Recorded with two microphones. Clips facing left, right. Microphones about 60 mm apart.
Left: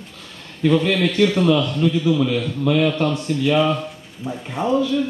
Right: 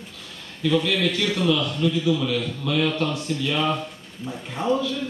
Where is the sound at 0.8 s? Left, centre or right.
Left; by 3.6 s centre.